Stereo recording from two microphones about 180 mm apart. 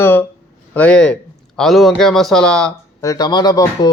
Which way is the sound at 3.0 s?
20° left (ahead or behind).